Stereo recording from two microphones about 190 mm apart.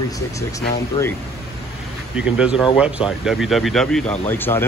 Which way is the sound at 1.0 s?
30° left (ahead or behind).